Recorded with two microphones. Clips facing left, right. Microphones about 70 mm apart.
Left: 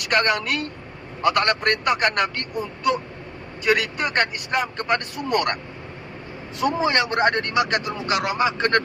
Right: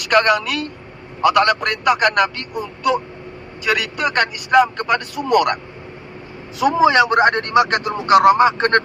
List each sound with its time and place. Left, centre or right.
0.1 s a woman's voice: right
6.6 s speech: right